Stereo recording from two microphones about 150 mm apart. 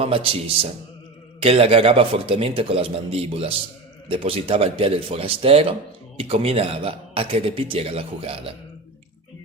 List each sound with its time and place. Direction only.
0.0 s a man's voice: 40° right (ahead or behind)